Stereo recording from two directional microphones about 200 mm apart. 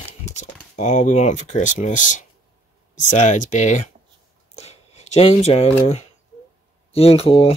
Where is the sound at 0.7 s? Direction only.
35° left (ahead or behind).